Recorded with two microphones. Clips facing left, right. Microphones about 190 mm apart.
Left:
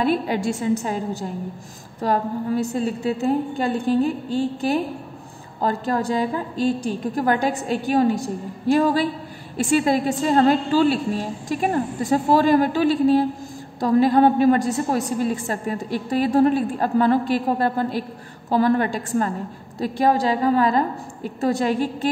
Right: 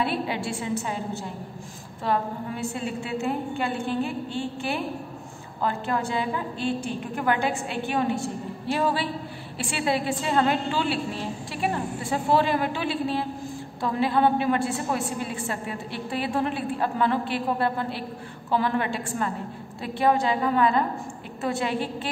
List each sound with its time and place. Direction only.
0.0 s a woman's voice: 40° left (ahead or behind)